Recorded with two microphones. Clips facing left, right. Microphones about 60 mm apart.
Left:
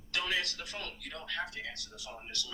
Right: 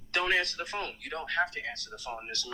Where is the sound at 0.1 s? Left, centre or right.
Right.